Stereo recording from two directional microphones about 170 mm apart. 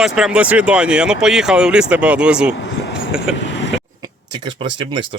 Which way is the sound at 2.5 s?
90° left.